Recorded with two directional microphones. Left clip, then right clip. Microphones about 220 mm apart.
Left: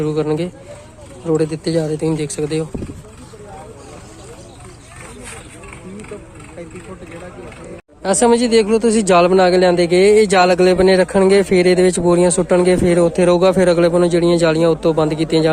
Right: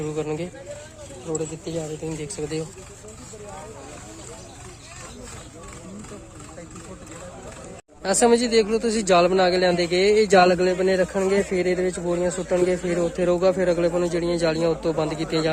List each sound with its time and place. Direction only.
0.0 s a man's voice: 15° left (ahead or behind)
1.3 s a man's voice: 25° left (ahead or behind)
8.0 s a man's voice: 10° left (ahead or behind)